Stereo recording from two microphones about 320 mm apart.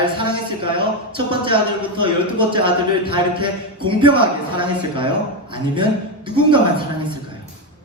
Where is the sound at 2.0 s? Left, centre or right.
Centre.